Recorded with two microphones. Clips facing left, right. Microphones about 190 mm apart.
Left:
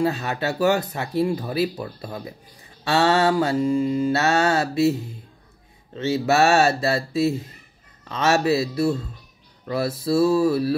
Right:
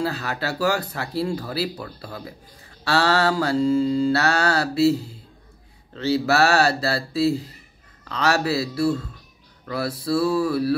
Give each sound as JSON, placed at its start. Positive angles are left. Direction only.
{"t": 0.0, "sound": "speech", "side_deg": 20}